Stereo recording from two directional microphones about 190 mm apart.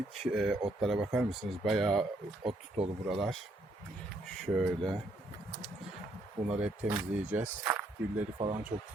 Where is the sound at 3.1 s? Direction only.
Centre (ahead or behind).